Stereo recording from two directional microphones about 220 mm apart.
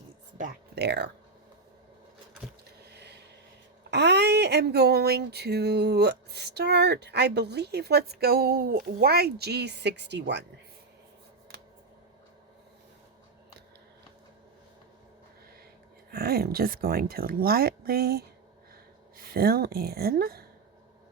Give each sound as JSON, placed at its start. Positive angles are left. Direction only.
{"t": 0.8, "sound": "speech", "side_deg": -50}
{"t": 2.9, "sound": "a sound", "side_deg": -50}
{"t": 3.9, "sound": "speech", "side_deg": -50}
{"t": 16.1, "sound": "speech", "side_deg": -45}